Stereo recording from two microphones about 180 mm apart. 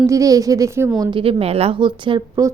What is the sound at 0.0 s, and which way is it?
Speech, 20° right (ahead or behind).